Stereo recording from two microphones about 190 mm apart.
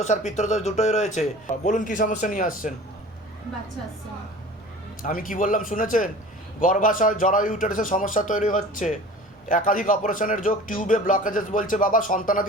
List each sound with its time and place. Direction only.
0.3 s a man's voice: 40° left (ahead or behind)
5.0 s a man's voice: 45° left (ahead or behind)